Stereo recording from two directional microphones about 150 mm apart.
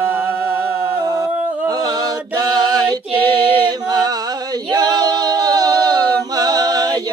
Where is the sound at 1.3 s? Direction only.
10° right (ahead or behind).